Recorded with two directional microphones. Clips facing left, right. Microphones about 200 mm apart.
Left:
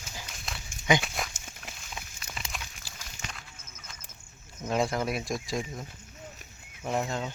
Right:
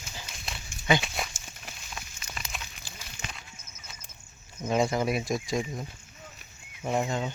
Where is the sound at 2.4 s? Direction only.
Centre (ahead or behind).